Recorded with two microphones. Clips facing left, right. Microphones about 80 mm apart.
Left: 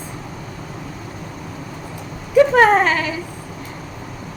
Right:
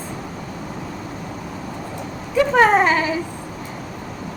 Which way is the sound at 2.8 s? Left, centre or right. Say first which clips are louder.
Right 1 dB; right.